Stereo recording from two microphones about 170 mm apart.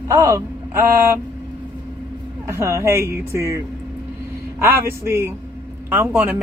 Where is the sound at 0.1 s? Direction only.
20° right (ahead or behind).